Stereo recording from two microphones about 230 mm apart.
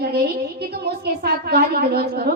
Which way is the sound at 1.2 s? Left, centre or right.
Right.